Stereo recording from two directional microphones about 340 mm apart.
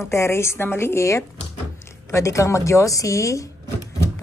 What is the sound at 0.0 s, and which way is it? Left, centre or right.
Speech, centre.